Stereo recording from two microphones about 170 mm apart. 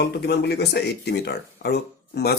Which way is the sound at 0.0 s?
70° left (ahead or behind).